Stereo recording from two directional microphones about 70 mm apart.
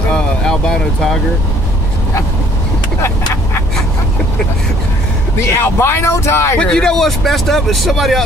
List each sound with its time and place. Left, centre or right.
0.1 s speech: centre
5.4 s speech: left
6.6 s speech: centre